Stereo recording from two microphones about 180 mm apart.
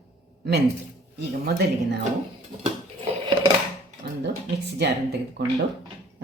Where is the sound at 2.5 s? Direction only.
25° right (ahead or behind).